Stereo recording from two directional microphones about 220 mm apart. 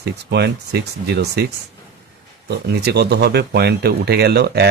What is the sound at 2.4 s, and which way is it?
Speech, 50° right (ahead or behind).